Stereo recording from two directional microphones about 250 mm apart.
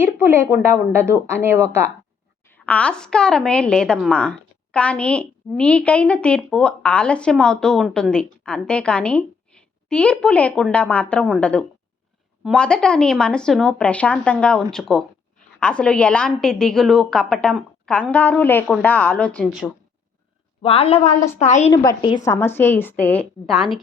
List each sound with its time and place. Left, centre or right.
0.0 s speech: centre
2.5 s a woman's voice: centre
20.6 s a woman's voice: left
21.7 s a woman's voice: centre